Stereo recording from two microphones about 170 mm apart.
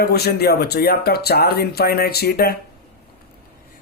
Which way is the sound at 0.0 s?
70° left (ahead or behind).